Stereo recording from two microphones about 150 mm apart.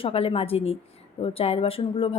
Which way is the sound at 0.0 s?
40° left (ahead or behind).